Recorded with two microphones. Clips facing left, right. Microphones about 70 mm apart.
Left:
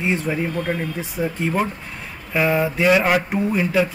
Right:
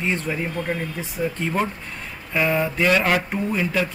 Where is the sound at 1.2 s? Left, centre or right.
Left.